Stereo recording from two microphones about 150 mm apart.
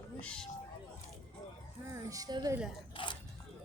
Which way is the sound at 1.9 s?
25° right (ahead or behind).